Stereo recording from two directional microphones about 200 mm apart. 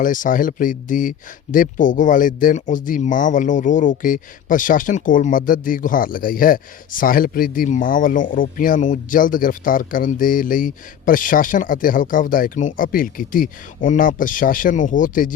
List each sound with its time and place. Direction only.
0.0 s speech: 40° left (ahead or behind)